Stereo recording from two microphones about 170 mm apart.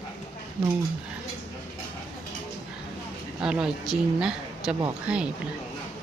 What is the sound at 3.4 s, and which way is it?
Speech, 5° right (ahead or behind).